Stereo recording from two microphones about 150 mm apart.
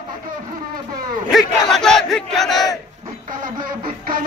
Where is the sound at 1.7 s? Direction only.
5° left (ahead or behind).